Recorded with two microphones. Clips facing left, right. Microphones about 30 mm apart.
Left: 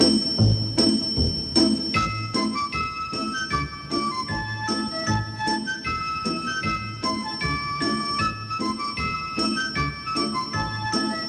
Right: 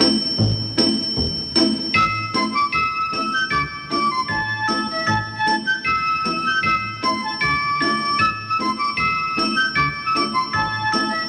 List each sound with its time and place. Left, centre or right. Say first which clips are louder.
0.0 s music: right 1 dB; right